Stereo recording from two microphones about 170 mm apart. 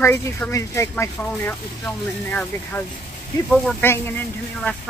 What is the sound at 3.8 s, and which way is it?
Speech, 15° left (ahead or behind).